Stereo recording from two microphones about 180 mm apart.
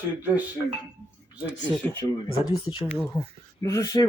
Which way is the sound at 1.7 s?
10° left (ahead or behind).